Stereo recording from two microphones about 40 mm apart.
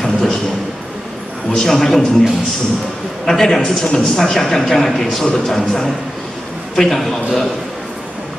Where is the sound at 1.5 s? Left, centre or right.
Centre.